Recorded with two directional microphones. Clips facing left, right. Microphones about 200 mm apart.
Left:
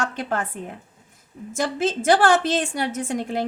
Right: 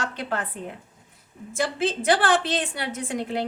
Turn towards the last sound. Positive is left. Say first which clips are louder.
# left 2 dB
turn(degrees=45)  # may be behind; listen again after turning